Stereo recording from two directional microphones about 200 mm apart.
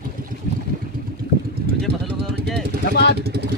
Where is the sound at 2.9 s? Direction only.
55° left (ahead or behind).